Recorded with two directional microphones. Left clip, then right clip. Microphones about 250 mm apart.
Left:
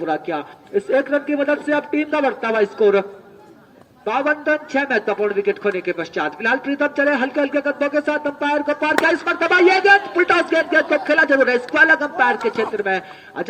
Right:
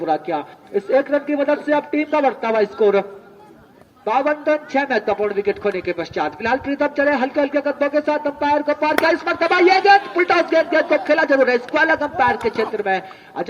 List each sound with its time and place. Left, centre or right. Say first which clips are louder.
0.0 s a man's voice: right 2 dB; left